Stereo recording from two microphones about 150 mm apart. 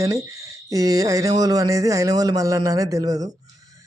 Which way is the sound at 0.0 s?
20° right (ahead or behind).